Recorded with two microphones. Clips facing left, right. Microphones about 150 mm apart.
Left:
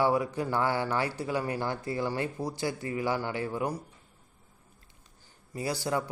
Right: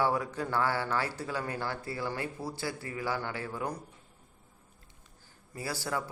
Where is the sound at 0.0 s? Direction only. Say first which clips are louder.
Left 3 dB; 15° left (ahead or behind).